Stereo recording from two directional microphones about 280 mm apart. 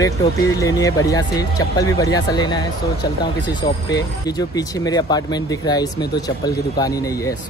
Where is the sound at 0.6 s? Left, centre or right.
Centre.